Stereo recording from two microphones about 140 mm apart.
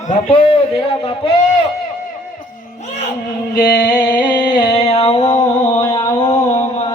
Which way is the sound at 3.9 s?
30° left (ahead or behind).